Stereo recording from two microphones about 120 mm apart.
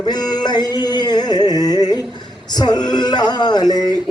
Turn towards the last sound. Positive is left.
turn(degrees=35)  # may be behind; listen again after turning